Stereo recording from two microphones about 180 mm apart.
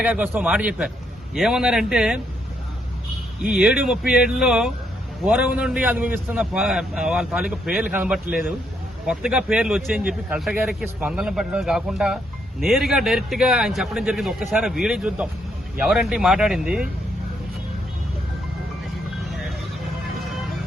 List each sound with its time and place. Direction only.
0.0 s a man's voice: 10° right (ahead or behind)
3.4 s speech: 5° right (ahead or behind)
16.6 s speech: 55° right (ahead or behind)